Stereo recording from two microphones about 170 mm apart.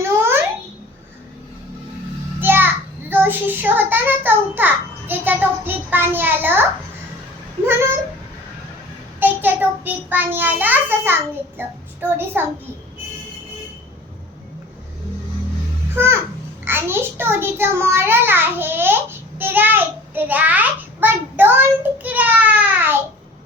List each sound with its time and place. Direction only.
0.0 s babbling: 15° right (ahead or behind)
2.4 s child singing: 10° right (ahead or behind)
9.2 s a child's voice: 10° right (ahead or behind)
16.6 s a child's voice: 15° right (ahead or behind)